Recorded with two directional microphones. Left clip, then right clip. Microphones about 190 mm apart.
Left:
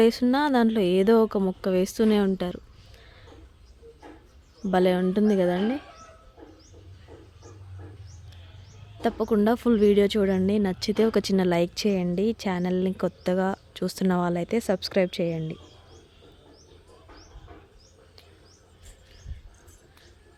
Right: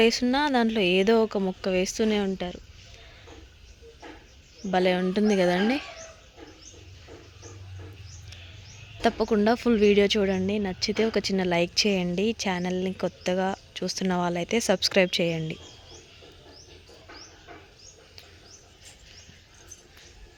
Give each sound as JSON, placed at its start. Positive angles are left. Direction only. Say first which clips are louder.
{"t": 0.0, "sound": "speech", "louder": "left 1 dB", "side_deg": 25}
{"t": 4.7, "sound": "speech", "louder": "left 1 dB", "side_deg": 25}
{"t": 5.5, "sound": "speech", "louder": "right 2 dB", "side_deg": 5}
{"t": 9.0, "sound": "speech", "louder": "right 1 dB", "side_deg": 10}